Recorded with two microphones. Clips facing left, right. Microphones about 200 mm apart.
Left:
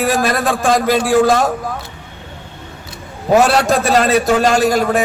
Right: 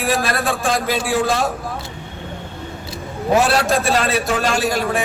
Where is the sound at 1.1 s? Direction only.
50° left (ahead or behind).